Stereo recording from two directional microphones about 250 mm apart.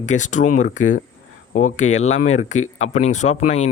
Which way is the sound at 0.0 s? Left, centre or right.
Left.